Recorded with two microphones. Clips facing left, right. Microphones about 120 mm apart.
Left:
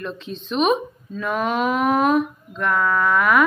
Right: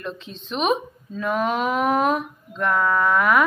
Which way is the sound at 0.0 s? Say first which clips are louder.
Left 3 dB; 20° right (ahead or behind).